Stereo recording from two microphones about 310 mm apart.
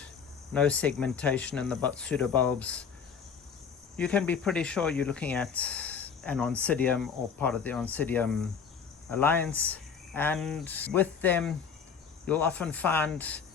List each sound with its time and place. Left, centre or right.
0.5 s speech: centre
3.9 s speech: centre